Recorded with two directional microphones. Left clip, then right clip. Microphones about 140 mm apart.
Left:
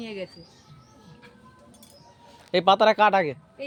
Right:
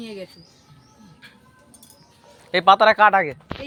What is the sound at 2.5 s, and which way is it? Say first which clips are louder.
Speech: right 4 dB; 45° left (ahead or behind).